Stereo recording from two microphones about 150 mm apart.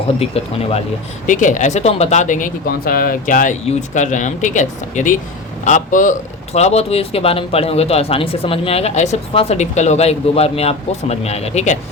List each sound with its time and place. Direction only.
0.2 s speech: 40° left (ahead or behind)
1.3 s a man's voice: 55° left (ahead or behind)